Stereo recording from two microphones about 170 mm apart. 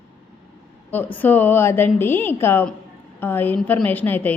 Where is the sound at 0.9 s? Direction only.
10° left (ahead or behind).